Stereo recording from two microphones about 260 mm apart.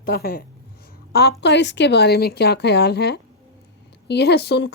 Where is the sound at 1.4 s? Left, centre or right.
Left.